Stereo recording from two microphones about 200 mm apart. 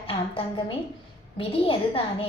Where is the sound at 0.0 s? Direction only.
30° left (ahead or behind).